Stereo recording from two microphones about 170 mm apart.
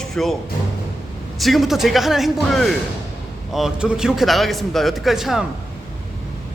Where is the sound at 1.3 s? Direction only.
Centre (ahead or behind).